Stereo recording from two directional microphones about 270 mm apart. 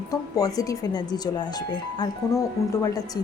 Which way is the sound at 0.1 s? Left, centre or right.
Centre.